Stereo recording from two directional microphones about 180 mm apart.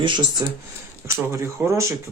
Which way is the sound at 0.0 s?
25° right (ahead or behind).